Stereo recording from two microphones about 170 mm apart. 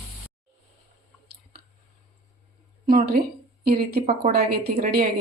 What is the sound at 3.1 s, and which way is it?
A woman's voice, 65° right (ahead or behind).